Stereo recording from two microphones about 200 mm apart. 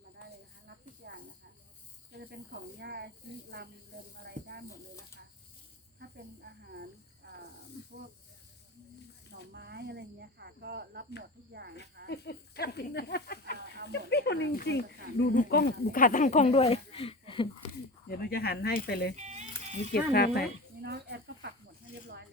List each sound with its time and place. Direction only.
1.0 s snake: 50° right (ahead or behind)
2.7 s speech: 55° right (ahead or behind)
6.0 s speech: 55° right (ahead or behind)
7.8 s wild animals: 55° left (ahead or behind)
9.3 s speech: 55° right (ahead or behind)
12.1 s speech: 55° left (ahead or behind); by 17.7 s 25° left (ahead or behind)
18.1 s speech: 50° left (ahead or behind)
19.1 s music: 35° right (ahead or behind)
19.7 s speech: 55° left (ahead or behind)
20.8 s snake: 55° right (ahead or behind)